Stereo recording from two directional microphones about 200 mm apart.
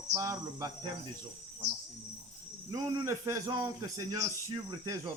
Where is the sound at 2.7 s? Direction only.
15° right (ahead or behind).